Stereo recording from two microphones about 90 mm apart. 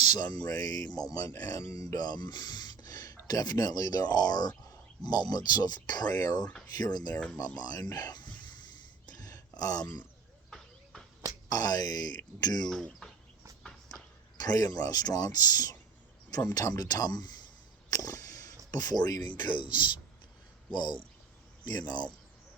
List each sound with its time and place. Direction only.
0.0 s speech: 50° left (ahead or behind)
9.0 s a sound: 45° left (ahead or behind)
11.4 s speech: 45° left (ahead or behind)
12.7 s speech: 5° left (ahead or behind)
13.6 s walk: 5° left (ahead or behind)
14.3 s speech: 45° left (ahead or behind)
17.9 s a sound: 40° left (ahead or behind)
19.5 s a sound: 60° left (ahead or behind)
21.6 s speech: 50° left (ahead or behind)